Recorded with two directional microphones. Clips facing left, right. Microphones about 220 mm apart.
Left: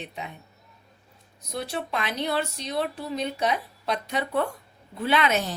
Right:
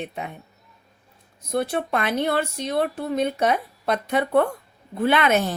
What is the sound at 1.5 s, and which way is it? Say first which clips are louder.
A woman's voice: right 7 dB; 55° right (ahead or behind).